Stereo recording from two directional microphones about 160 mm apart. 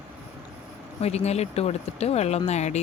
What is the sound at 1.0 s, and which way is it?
Speech, 40° left (ahead or behind).